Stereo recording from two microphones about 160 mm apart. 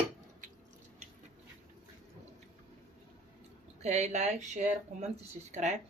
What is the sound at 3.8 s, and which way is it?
Speech, 45° right (ahead or behind).